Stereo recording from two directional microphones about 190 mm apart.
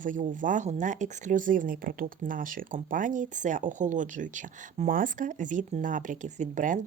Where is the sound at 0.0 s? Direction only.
45° right (ahead or behind).